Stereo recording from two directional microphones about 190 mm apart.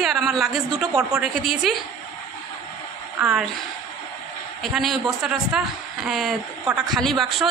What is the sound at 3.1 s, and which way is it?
Speech, 5° right (ahead or behind).